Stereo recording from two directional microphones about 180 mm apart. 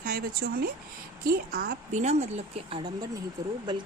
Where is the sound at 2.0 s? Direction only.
40° right (ahead or behind).